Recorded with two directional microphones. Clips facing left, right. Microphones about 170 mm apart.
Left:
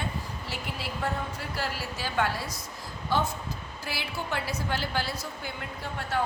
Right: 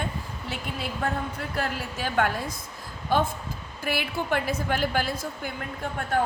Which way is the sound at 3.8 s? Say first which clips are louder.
Right 7 dB; 55° right (ahead or behind).